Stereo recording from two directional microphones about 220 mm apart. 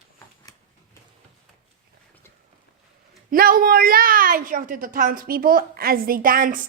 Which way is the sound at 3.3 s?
40° right (ahead or behind).